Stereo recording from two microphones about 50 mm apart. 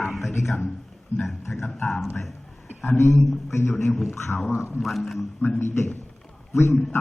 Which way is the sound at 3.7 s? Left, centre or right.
Centre.